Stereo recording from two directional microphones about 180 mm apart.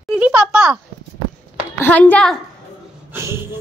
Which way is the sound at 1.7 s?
10° left (ahead or behind).